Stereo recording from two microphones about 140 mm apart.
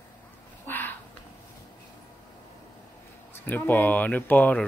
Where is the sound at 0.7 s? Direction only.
15° left (ahead or behind).